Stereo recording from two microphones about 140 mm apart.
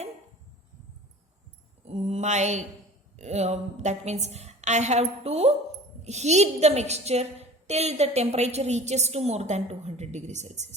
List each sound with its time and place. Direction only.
1.8 s mantra: 50° right (ahead or behind)
3.2 s a woman's voice: 55° right (ahead or behind)